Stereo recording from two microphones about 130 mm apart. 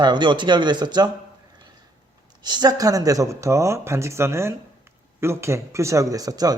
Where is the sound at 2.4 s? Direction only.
30° right (ahead or behind).